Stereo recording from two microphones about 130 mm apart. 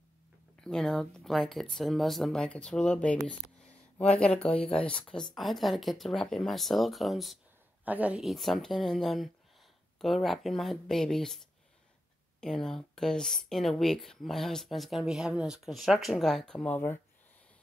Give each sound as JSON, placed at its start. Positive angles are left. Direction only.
{"t": 0.7, "sound": "speech", "side_deg": 5}
{"t": 7.8, "sound": "a woman's voice", "side_deg": -10}
{"t": 8.2, "sound": "speech", "side_deg": 0}
{"t": 16.7, "sound": "speech", "side_deg": 15}